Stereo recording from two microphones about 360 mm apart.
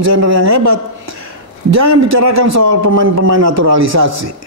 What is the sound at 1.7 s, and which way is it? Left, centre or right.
Speech, right.